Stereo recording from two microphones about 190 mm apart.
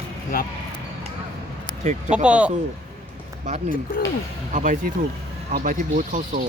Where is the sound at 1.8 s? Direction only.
35° right (ahead or behind).